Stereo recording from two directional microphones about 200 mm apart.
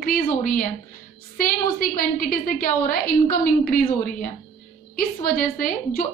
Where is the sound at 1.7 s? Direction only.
45° left (ahead or behind).